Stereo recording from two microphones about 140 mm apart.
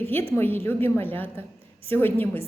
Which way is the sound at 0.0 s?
15° left (ahead or behind).